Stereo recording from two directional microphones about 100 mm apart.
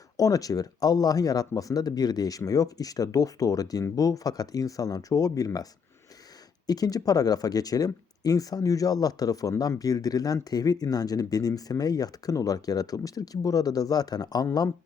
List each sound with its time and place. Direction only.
0.2 s speech: 35° left (ahead or behind)
6.7 s speech: 40° left (ahead or behind)